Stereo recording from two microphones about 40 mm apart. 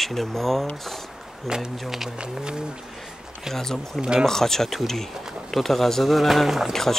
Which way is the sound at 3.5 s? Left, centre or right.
Centre.